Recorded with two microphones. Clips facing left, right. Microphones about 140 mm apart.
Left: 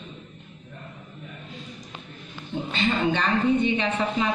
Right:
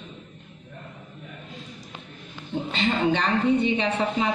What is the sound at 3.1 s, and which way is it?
A woman's voice, 30° right (ahead or behind).